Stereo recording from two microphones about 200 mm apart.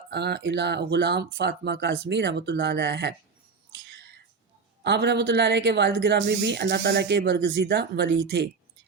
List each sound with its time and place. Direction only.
0.1 s speech: 55° right (ahead or behind)
3.7 s a sound: 60° right (ahead or behind)
4.8 s speech: 60° right (ahead or behind)